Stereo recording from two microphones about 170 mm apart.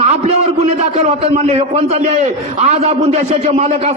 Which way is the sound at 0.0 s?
40° right (ahead or behind).